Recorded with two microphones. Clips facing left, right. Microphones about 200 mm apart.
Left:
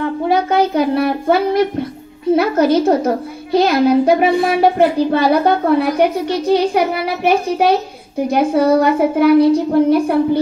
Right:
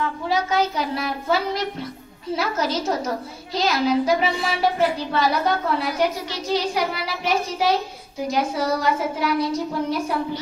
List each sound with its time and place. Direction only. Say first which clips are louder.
0.3 s speech: left 7 dB; 55° left (ahead or behind)